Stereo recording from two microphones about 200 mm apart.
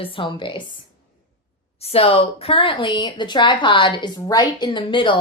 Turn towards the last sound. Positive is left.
turn(degrees=25)  # may be behind; listen again after turning